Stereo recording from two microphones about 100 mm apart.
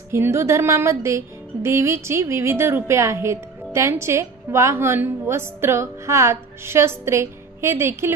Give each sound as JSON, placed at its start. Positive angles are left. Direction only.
{"t": 0.1, "sound": "music", "side_deg": -25}